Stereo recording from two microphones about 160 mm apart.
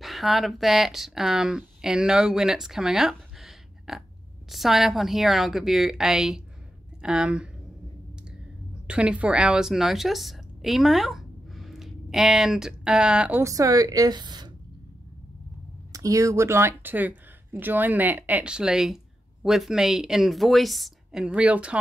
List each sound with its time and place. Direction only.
0.0 s speech: centre (ahead or behind)
8.8 s a woman's voice: 5° right (ahead or behind)
13.4 s a woman's voice: 20° right (ahead or behind)
15.9 s speech: 20° right (ahead or behind)